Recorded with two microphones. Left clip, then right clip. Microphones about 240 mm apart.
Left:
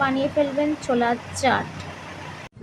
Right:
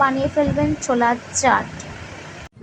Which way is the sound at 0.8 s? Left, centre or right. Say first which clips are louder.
Right 4 dB; centre.